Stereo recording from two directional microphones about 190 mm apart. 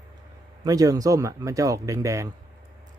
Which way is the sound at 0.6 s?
20° right (ahead or behind).